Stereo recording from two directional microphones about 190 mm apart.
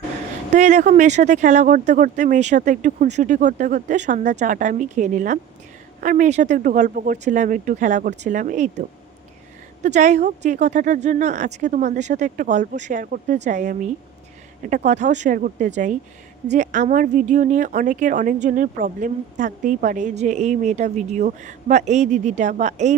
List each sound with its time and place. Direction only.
0.5 s a woman's voice: 40° right (ahead or behind)
9.8 s a woman's voice: 40° right (ahead or behind)